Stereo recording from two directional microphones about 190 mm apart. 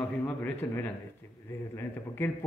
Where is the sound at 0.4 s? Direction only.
10° left (ahead or behind).